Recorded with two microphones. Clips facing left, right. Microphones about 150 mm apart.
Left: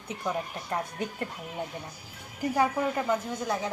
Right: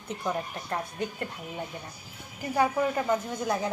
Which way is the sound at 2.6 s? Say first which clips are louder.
Right 2 dB; centre (ahead or behind).